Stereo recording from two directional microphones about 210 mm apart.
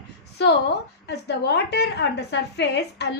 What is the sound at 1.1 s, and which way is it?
A woman's voice, 55° left (ahead or behind).